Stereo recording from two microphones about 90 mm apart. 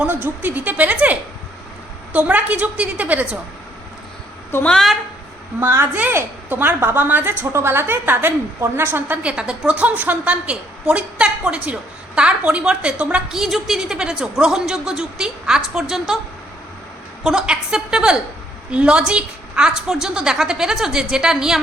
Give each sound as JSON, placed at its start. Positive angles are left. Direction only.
{"t": 0.0, "sound": "a woman's voice", "side_deg": -20}
{"t": 4.6, "sound": "a woman's voice", "side_deg": 5}
{"t": 5.5, "sound": "a woman's voice", "side_deg": -25}
{"t": 9.3, "sound": "a woman's voice", "side_deg": -10}
{"t": 13.4, "sound": "a woman's voice", "side_deg": -5}
{"t": 17.2, "sound": "a woman's voice", "side_deg": -10}